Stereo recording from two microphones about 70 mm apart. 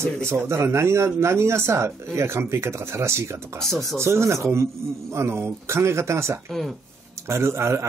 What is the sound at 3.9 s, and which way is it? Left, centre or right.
Speech, right.